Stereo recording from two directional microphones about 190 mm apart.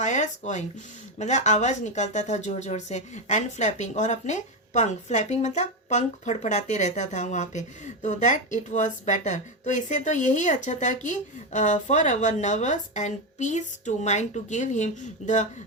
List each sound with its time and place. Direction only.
0.0 s a woman's voice: 40° left (ahead or behind)